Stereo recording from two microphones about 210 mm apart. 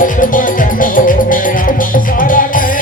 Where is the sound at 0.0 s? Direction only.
40° left (ahead or behind).